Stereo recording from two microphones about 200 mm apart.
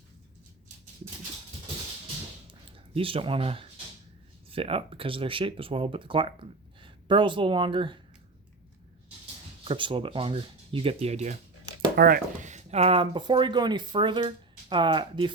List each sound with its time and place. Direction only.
2.5 s speech: 25° right (ahead or behind)
9.6 s speech: 25° right (ahead or behind)
11.9 s speech: 45° right (ahead or behind); by 15.3 s 25° right (ahead or behind)